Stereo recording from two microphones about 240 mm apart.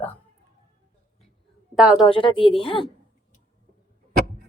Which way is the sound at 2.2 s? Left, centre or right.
Left.